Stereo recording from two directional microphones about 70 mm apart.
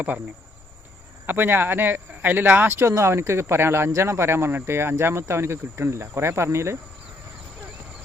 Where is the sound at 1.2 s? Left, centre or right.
Right.